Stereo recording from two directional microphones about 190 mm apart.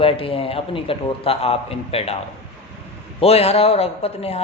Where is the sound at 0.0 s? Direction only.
30° left (ahead or behind).